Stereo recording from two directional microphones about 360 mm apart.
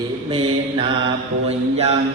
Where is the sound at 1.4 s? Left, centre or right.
Centre.